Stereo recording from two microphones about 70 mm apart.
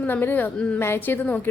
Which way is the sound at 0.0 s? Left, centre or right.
Left.